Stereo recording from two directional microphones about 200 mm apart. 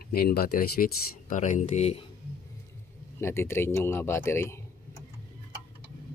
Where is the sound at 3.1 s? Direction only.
10° left (ahead or behind).